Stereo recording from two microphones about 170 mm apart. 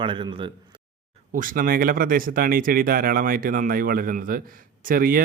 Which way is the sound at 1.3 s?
55° right (ahead or behind).